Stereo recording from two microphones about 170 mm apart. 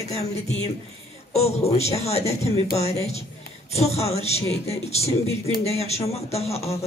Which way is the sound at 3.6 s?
40° left (ahead or behind).